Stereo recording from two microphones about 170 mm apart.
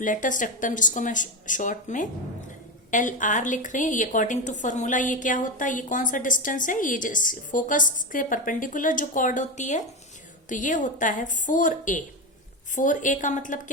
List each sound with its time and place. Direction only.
0.0 s a woman's voice: 50° left (ahead or behind)